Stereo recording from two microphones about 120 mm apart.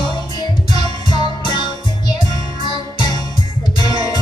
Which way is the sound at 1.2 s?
40° left (ahead or behind).